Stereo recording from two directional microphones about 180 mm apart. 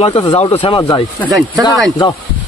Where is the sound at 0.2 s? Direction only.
30° left (ahead or behind).